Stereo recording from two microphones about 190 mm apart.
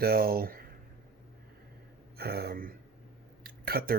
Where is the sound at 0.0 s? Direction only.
55° right (ahead or behind).